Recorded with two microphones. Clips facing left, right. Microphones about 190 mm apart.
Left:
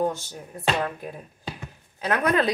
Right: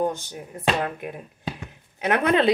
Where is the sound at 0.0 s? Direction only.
20° right (ahead or behind).